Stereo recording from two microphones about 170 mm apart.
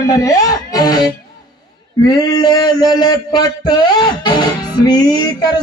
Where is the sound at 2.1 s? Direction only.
20° left (ahead or behind).